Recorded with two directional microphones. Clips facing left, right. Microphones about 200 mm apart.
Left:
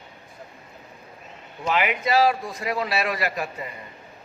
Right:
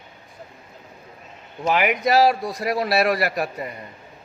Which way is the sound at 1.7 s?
50° right (ahead or behind).